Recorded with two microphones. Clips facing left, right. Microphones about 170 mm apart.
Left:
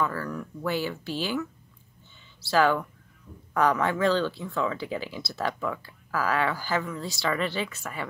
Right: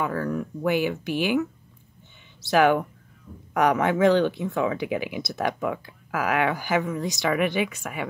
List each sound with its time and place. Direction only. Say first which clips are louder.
0.0 s speech: right 3 dB; 20° right (ahead or behind)
2.4 s speech: right 3 dB; 20° right (ahead or behind)